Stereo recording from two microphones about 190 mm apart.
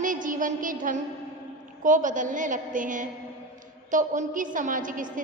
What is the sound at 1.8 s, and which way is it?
A woman's voice, 45° right (ahead or behind).